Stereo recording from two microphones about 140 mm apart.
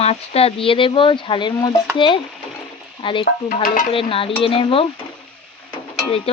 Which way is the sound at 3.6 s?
90° left.